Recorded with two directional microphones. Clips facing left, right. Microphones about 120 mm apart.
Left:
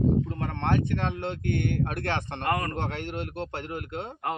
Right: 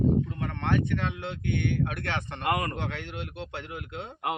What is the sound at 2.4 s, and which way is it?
Speech, 10° right (ahead or behind).